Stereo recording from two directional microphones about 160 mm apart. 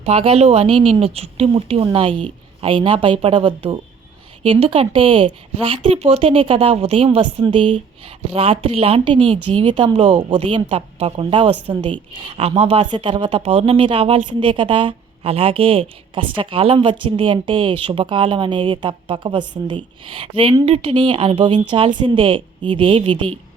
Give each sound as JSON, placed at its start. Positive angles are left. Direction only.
{"t": 0.0, "sound": "a woman's voice", "side_deg": -40}